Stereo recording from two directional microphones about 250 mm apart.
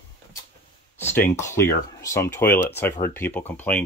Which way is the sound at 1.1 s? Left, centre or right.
Centre.